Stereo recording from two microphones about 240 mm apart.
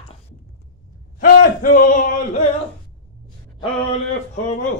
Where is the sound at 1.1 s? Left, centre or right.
Left.